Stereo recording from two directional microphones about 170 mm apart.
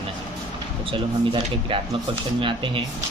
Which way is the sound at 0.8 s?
30° right (ahead or behind).